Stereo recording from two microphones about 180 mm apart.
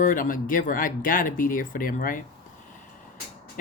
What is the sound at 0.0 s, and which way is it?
Speech, 50° left (ahead or behind).